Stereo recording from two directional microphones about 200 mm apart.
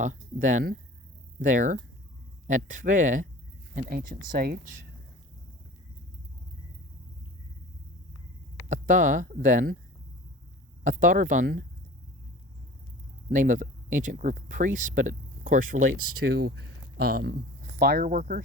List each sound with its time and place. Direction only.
0.0 s speech: 40° right (ahead or behind)
8.7 s speech: 40° right (ahead or behind)
10.8 s speech: 40° right (ahead or behind)
13.3 s speech: 40° right (ahead or behind)
16.0 s speech: 90° right
16.2 s speech: 50° right (ahead or behind)